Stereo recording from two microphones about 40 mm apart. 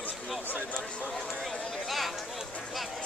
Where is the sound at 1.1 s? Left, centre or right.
Centre.